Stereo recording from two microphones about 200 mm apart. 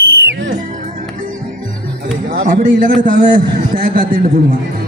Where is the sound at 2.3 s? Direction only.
45° right (ahead or behind).